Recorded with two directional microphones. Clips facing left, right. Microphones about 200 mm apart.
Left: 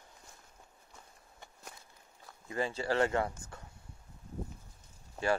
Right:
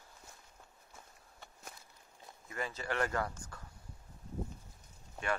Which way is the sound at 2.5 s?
30° left (ahead or behind).